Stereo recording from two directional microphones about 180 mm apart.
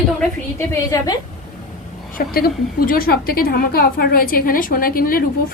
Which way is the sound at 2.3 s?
55° left (ahead or behind).